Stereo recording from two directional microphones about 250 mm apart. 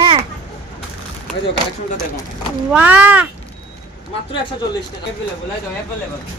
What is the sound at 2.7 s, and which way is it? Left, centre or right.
Speech, centre.